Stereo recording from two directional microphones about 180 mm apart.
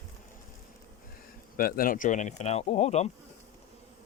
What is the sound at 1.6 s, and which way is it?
Speech, 55° left (ahead or behind).